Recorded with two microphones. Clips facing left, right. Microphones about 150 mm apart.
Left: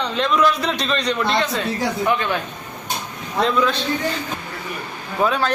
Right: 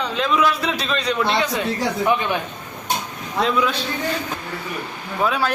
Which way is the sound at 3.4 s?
10° right (ahead or behind).